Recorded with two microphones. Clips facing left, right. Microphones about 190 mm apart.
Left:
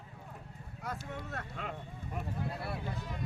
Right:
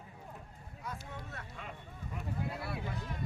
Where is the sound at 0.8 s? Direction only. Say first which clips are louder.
Left 4 dB; 75° left (ahead or behind).